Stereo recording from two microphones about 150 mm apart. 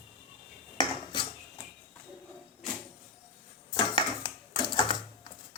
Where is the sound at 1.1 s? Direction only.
30° left (ahead or behind).